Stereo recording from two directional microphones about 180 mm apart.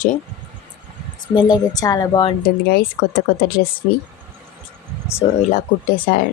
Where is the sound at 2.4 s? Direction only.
55° left (ahead or behind).